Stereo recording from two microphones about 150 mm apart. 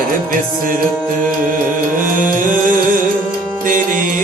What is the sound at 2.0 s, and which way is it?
Music, 65° right (ahead or behind).